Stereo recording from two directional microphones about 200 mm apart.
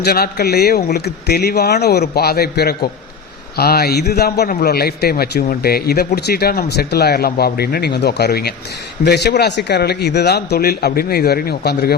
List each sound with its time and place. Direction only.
0.0 s a man's voice: 50° left (ahead or behind)